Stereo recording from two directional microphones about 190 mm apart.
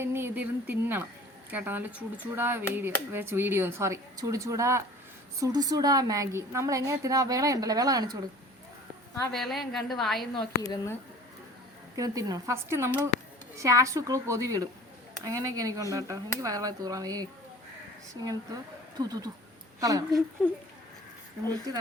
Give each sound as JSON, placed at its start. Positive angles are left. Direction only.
{"t": 0.0, "sound": "a woman's voice", "side_deg": -10}
{"t": 9.3, "sound": "a woman's voice", "side_deg": 0}
{"t": 10.5, "sound": "speech", "side_deg": 15}
{"t": 11.9, "sound": "a woman's voice", "side_deg": -20}